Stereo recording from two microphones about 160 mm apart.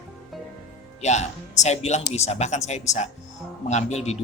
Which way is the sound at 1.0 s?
45° left (ahead or behind).